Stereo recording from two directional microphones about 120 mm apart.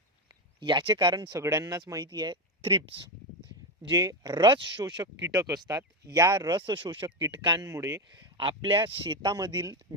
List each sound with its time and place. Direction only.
0.3 s speech: 40° right (ahead or behind)
1.3 s speech: 25° right (ahead or behind); by 2.8 s 40° right (ahead or behind)
3.8 s speech: 30° right (ahead or behind)
7.7 s speech: 25° right (ahead or behind)
8.4 s speech: 45° right (ahead or behind)